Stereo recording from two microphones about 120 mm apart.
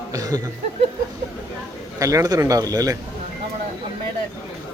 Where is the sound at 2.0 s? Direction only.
25° right (ahead or behind).